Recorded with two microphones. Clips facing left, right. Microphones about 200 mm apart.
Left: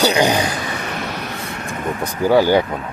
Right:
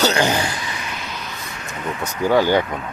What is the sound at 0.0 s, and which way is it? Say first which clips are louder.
Speech: left 3 dB; 15° left (ahead or behind).